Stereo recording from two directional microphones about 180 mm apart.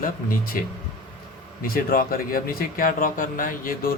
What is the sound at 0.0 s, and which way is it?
Speech, 50° left (ahead or behind).